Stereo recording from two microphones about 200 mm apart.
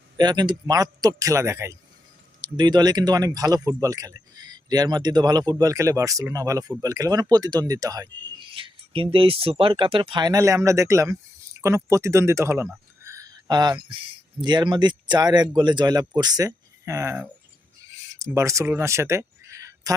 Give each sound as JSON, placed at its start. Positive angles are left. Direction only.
{"t": 0.2, "sound": "a man's voice", "side_deg": -20}